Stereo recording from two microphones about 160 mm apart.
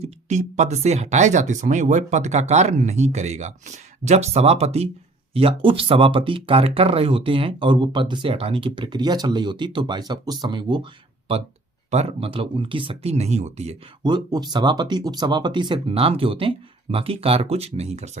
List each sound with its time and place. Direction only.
0.0 s speech: 45° right (ahead or behind); by 10.8 s 30° right (ahead or behind)
11.9 s speech: 40° right (ahead or behind)
14.0 s speech: 25° right (ahead or behind); by 18.2 s 45° right (ahead or behind)